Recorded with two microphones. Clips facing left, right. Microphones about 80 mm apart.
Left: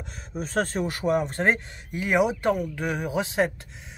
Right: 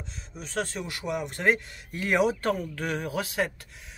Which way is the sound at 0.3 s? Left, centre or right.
Left.